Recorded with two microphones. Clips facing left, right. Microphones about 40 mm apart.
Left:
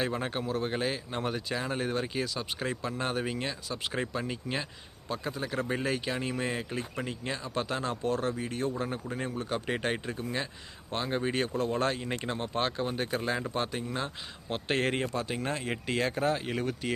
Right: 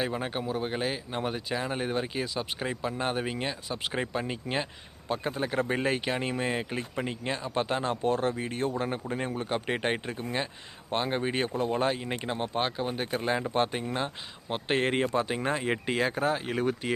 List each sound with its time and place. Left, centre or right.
0.0 s speech: centre
13.5 s speech: right; by 16.6 s centre